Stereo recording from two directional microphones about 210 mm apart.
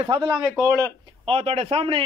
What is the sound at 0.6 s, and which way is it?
A man's voice, 15° right (ahead or behind).